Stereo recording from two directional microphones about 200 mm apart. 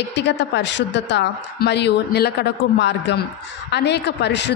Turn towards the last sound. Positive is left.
turn(degrees=60)  # may be behind; listen again after turning